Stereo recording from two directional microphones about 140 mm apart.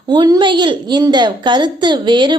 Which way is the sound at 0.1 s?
30° right (ahead or behind).